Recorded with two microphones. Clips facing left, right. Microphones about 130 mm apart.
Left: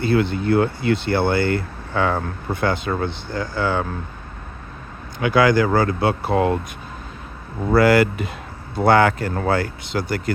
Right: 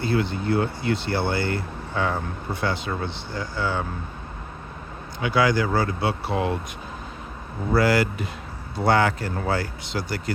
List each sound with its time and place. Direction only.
0.0 s speech: 60° left (ahead or behind)
5.2 s speech: 55° left (ahead or behind)
7.7 s speech: 60° left (ahead or behind)